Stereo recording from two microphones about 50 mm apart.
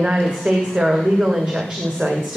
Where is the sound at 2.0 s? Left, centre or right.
Right.